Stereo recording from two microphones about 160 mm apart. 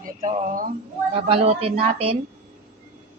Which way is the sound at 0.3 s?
40° right (ahead or behind).